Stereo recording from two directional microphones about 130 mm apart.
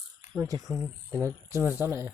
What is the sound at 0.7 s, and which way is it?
Speech, 20° right (ahead or behind).